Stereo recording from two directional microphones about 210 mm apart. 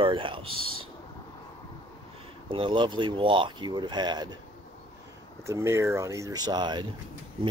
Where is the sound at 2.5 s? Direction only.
25° right (ahead or behind).